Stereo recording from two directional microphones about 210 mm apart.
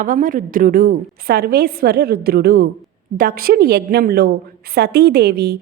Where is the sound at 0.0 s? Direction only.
40° right (ahead or behind).